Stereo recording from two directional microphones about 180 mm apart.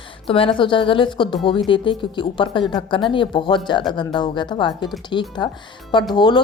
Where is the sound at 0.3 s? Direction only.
30° left (ahead or behind).